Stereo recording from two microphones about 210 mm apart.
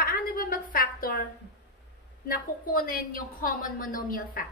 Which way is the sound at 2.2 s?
45° left (ahead or behind).